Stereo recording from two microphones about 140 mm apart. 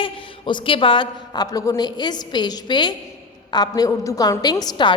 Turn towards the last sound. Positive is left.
turn(degrees=30)  # may be behind; listen again after turning